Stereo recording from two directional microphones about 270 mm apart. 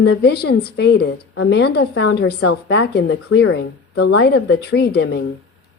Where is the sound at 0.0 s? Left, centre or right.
Left.